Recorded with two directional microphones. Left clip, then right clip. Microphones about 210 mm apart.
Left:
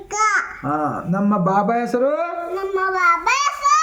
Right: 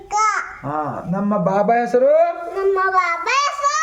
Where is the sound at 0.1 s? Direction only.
15° left (ahead or behind).